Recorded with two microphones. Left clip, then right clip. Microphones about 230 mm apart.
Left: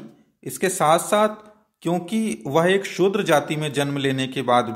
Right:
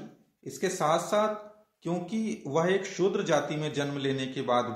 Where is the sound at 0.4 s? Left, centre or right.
Left.